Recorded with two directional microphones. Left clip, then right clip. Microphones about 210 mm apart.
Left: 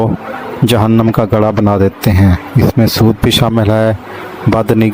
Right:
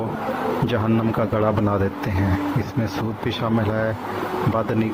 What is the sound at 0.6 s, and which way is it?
Speech, 55° left (ahead or behind).